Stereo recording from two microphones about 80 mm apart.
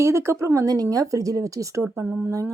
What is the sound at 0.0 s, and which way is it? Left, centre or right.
Speech, right.